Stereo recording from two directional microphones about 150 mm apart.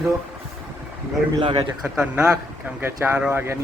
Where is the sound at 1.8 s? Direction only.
10° right (ahead or behind).